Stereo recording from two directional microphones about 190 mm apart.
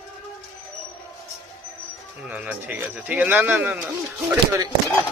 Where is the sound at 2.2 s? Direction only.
5° right (ahead or behind).